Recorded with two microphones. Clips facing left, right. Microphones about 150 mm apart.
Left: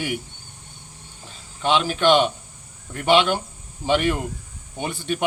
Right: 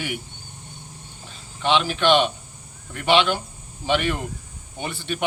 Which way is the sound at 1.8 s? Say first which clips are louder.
Left 1 dB; 40° left (ahead or behind).